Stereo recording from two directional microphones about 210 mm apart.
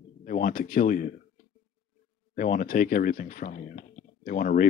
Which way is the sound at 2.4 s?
40° left (ahead or behind).